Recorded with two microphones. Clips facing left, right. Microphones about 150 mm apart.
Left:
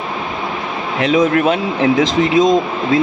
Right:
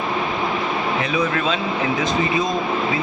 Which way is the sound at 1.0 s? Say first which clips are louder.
Left 13 dB; 90° left.